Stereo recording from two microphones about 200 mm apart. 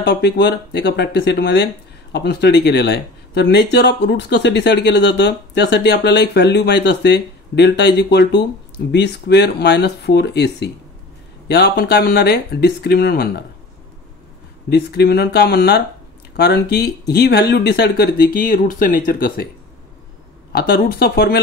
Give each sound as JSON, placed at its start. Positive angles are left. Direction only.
{"t": 0.0, "sound": "speech", "side_deg": 55}
{"t": 14.7, "sound": "speech", "side_deg": 55}
{"t": 20.5, "sound": "speech", "side_deg": 50}